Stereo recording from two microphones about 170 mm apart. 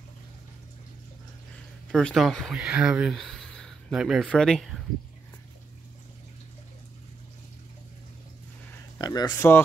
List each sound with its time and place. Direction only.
1.9 s speech: 5° left (ahead or behind)
8.9 s speech: 25° left (ahead or behind)